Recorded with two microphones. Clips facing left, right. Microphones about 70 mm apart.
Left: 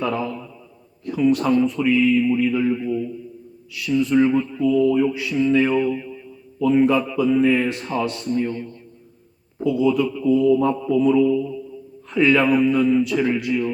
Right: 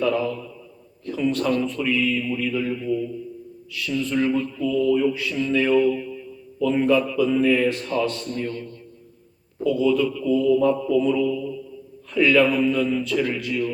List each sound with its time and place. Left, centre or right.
0.0 s a man's voice: left